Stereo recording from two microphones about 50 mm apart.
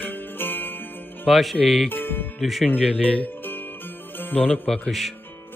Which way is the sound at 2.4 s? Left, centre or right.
Centre.